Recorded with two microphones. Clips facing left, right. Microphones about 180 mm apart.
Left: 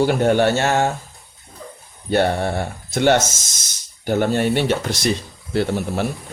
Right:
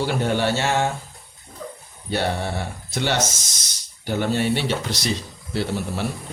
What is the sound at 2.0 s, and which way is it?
Speech, 55° left (ahead or behind).